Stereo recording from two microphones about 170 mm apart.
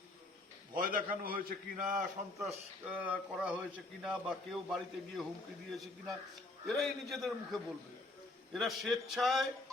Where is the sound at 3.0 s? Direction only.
10° right (ahead or behind).